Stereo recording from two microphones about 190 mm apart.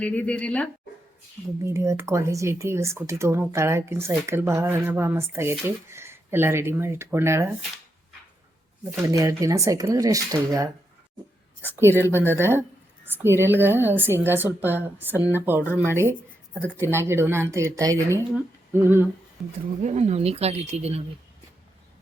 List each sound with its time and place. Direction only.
0.0 s a woman's voice: 5° left (ahead or behind)
1.6 s speech: 15° right (ahead or behind)
9.0 s speech: 15° right (ahead or behind)
11.8 s speech: 10° right (ahead or behind)
19.8 s speech: 35° right (ahead or behind)